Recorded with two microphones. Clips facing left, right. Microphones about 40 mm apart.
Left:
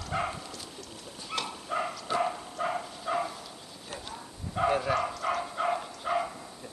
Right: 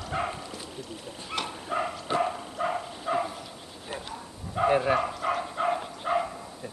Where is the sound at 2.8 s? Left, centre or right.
Centre.